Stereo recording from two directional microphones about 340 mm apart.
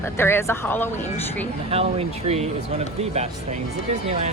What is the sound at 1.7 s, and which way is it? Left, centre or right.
Speech, centre.